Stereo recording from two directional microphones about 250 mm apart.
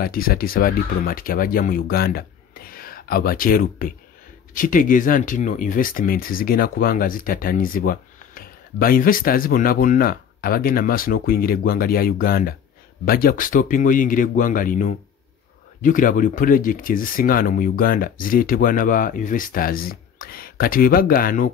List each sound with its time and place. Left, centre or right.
0.0 s speech: left